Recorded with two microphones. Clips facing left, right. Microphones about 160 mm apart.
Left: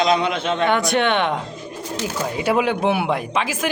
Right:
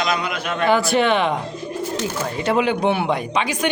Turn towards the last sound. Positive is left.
turn(degrees=0)  # may be behind; listen again after turning